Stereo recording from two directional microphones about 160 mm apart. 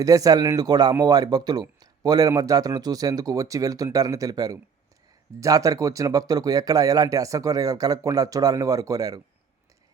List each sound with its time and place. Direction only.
0.0 s speech: 20° right (ahead or behind)